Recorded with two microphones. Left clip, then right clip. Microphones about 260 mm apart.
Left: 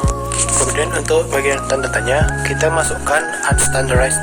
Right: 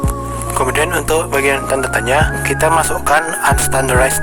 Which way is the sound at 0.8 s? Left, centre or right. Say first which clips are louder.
Even; right.